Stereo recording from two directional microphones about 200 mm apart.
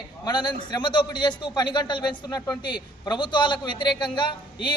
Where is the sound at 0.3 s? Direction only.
20° left (ahead or behind).